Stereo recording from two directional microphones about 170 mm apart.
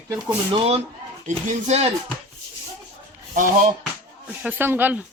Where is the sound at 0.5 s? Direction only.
35° right (ahead or behind).